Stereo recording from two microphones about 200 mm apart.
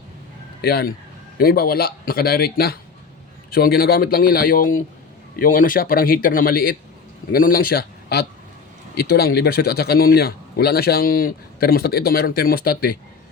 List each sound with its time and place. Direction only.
0.6 s a man's voice: 50° left (ahead or behind)